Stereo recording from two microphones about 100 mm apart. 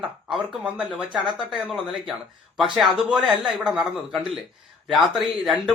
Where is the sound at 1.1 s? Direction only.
50° right (ahead or behind).